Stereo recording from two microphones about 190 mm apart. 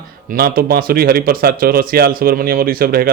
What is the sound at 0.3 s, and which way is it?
Speech, 50° right (ahead or behind).